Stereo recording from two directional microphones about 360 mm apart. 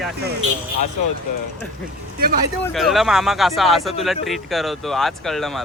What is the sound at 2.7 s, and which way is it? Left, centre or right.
Speech, centre.